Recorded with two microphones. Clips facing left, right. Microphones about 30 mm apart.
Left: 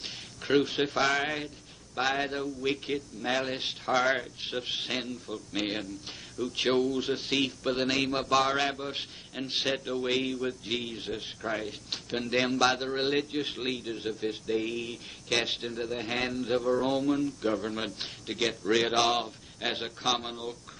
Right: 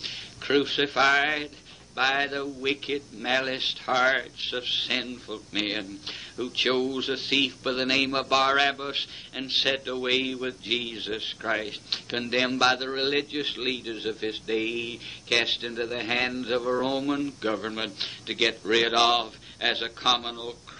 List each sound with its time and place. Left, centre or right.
0.0 s a man's voice: right